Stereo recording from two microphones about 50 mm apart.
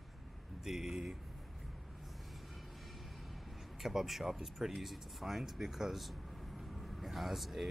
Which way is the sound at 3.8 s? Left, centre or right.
Centre.